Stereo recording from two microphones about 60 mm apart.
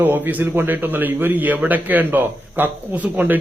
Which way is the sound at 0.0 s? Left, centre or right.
Right.